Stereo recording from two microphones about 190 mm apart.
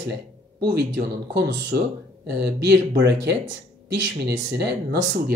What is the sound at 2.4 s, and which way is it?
Speech, 60° right (ahead or behind).